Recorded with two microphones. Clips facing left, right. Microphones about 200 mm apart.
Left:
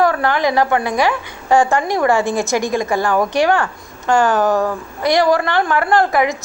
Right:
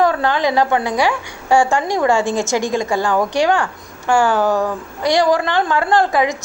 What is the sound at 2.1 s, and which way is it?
Speech, 15° left (ahead or behind).